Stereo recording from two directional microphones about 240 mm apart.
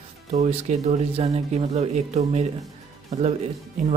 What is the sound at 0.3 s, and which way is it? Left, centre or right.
Speech, right.